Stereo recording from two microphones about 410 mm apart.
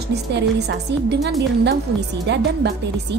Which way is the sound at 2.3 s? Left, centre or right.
Right.